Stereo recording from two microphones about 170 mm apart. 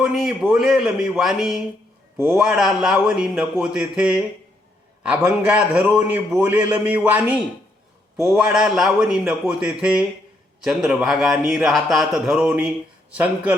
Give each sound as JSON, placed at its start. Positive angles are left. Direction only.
{"t": 0.0, "sound": "a man's voice", "side_deg": 0}